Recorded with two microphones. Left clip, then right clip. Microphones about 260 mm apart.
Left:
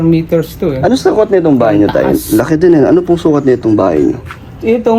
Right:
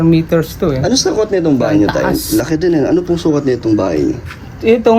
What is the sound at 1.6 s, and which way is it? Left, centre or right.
Speech, centre.